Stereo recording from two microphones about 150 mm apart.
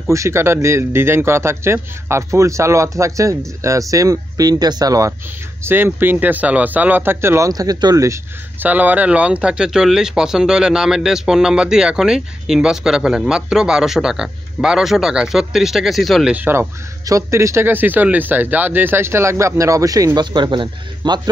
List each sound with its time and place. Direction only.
0.1 s speech: 20° right (ahead or behind); by 16.3 s centre (ahead or behind)
16.3 s speech: 15° right (ahead or behind)